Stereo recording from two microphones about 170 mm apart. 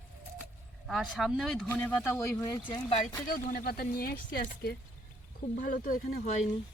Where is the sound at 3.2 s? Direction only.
55° left (ahead or behind).